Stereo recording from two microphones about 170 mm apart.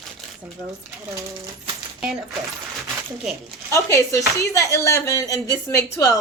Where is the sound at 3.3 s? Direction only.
5° right (ahead or behind).